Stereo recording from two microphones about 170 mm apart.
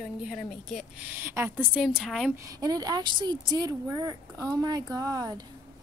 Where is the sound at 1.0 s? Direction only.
15° right (ahead or behind).